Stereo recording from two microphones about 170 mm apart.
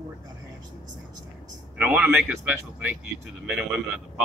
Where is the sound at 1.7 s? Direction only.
10° right (ahead or behind).